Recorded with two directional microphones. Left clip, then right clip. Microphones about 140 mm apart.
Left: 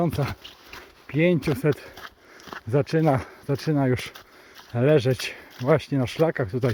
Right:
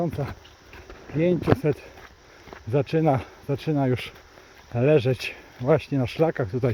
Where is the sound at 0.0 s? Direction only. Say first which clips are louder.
Left 3 dB; 30° left (ahead or behind).